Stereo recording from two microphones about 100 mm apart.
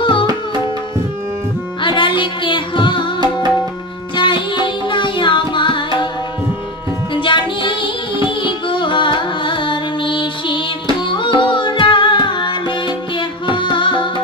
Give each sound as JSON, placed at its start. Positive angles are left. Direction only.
{"t": 0.0, "sound": "tabla", "side_deg": 60}
{"t": 1.8, "sound": "music", "side_deg": 55}
{"t": 4.1, "sound": "music", "side_deg": 55}
{"t": 7.2, "sound": "music", "side_deg": 55}